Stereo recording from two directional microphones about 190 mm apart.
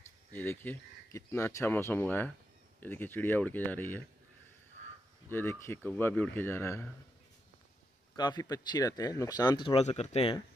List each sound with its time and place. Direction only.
0.3 s speech: 10° left (ahead or behind)
5.3 s speech: 10° left (ahead or behind)
8.2 s speech: 20° left (ahead or behind)